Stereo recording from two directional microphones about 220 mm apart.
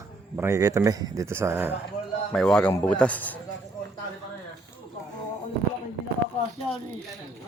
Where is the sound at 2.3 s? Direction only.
5° left (ahead or behind).